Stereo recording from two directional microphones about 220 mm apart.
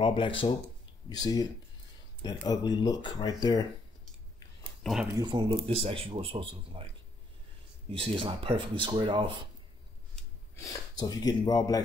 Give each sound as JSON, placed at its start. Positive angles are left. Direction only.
{"t": 0.0, "sound": "speech", "side_deg": 25}
{"t": 4.8, "sound": "speech", "side_deg": 0}
{"t": 5.2, "sound": "speech", "side_deg": -20}
{"t": 7.9, "sound": "speech", "side_deg": -25}
{"t": 10.1, "sound": "speech", "side_deg": 15}